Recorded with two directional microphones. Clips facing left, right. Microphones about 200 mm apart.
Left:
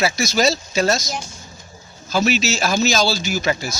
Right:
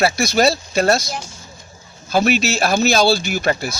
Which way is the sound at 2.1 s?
55° right (ahead or behind).